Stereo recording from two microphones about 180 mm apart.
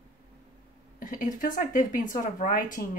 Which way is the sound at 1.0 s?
50° left (ahead or behind).